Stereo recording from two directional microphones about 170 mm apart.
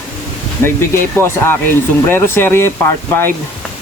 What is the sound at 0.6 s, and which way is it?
Speech, 15° left (ahead or behind).